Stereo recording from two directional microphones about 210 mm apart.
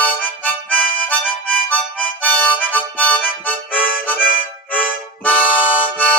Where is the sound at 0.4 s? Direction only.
5° left (ahead or behind).